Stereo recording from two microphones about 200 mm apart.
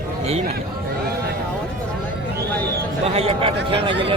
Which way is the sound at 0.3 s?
30° right (ahead or behind).